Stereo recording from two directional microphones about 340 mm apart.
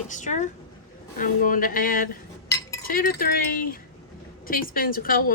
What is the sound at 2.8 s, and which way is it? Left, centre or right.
Speech, left.